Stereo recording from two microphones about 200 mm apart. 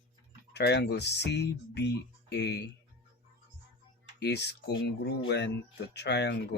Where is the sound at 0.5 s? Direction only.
55° left (ahead or behind).